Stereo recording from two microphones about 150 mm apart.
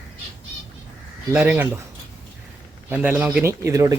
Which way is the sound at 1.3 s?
10° right (ahead or behind).